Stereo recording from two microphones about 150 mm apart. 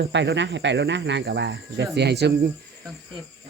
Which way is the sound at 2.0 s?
90° right.